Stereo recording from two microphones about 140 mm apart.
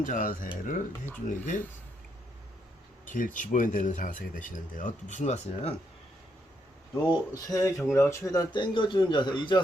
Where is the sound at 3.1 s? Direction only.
70° left (ahead or behind).